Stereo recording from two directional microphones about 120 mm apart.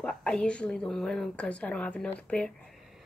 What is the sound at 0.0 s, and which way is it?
A woman's voice, 5° left (ahead or behind).